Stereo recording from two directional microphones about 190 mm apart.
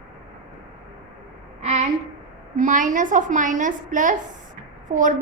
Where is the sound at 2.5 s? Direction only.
45° right (ahead or behind).